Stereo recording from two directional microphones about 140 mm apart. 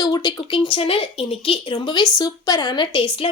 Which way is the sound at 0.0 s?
25° left (ahead or behind).